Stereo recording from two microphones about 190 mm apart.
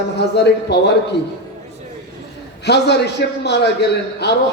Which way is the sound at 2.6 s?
60° left (ahead or behind).